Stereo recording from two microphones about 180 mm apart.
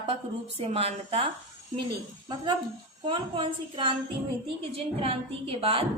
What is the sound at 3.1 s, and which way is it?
Speech, 30° right (ahead or behind).